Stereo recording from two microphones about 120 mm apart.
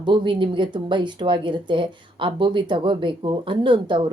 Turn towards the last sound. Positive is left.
turn(degrees=-40)  # may be behind; listen again after turning